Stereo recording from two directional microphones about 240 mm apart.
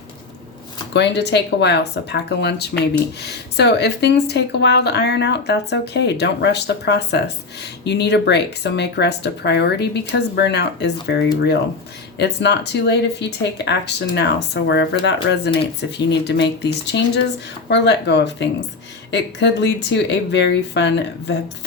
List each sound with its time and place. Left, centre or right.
0.9 s speech: left